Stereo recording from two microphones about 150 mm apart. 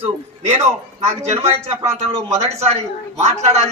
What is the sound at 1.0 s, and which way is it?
A man's voice, 45° right (ahead or behind).